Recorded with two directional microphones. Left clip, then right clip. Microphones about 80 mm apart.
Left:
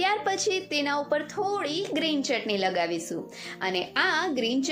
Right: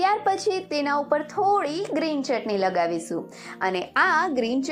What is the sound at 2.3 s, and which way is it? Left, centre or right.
Speech, centre.